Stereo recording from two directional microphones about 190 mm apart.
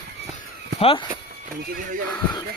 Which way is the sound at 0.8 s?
30° left (ahead or behind).